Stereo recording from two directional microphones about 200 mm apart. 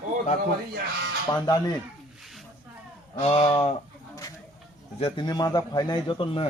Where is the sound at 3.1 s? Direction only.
30° left (ahead or behind).